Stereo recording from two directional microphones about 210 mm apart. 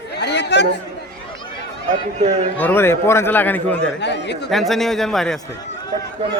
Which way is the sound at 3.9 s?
55° left (ahead or behind).